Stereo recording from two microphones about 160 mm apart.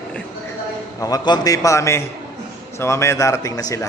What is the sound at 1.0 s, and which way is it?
A man's voice, 25° left (ahead or behind).